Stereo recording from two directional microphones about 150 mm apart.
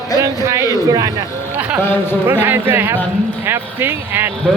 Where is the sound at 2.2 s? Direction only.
15° right (ahead or behind).